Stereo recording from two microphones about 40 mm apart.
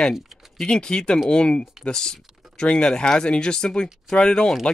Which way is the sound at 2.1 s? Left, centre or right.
Centre.